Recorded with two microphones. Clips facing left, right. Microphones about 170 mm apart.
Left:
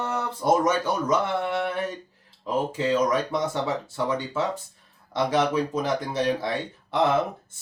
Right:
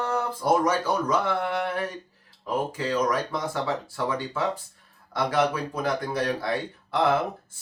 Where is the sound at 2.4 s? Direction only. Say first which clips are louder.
Left 3 dB; 25° left (ahead or behind).